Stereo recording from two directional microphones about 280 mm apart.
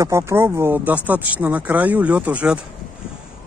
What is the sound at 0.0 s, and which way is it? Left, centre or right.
Speech, centre.